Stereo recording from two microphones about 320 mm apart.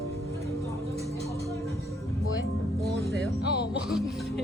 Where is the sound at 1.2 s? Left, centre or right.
Centre.